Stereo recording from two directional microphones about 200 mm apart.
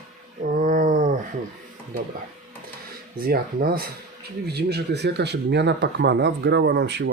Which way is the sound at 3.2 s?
45° right (ahead or behind).